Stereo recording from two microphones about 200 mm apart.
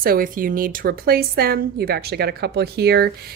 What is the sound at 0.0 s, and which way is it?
Speech, 45° right (ahead or behind).